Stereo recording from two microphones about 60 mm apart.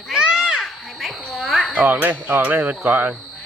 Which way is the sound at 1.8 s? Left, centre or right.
Right.